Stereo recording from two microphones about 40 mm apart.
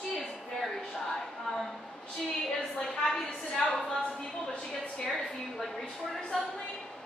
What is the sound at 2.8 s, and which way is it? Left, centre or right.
A woman's voice, centre.